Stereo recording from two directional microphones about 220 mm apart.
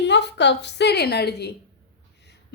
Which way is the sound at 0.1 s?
50° left (ahead or behind).